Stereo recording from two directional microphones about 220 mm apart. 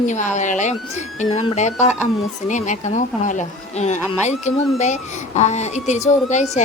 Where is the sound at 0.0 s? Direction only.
35° left (ahead or behind).